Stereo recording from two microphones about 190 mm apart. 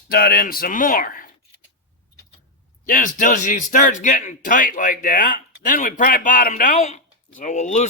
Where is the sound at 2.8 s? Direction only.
45° left (ahead or behind).